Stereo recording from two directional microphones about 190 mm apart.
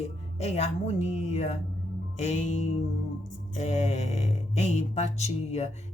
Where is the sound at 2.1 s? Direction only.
35° left (ahead or behind).